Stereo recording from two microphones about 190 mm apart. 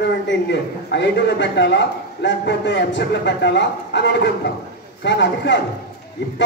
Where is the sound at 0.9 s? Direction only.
70° left (ahead or behind).